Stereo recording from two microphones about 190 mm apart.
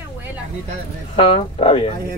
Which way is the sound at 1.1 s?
30° left (ahead or behind).